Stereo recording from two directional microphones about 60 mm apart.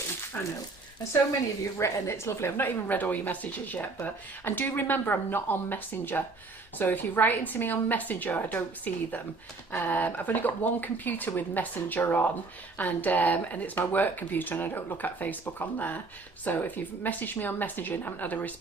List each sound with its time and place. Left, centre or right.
0.3 s speech: left
1.8 s speech: left